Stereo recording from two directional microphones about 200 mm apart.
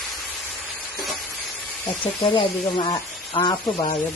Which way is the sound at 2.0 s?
25° left (ahead or behind).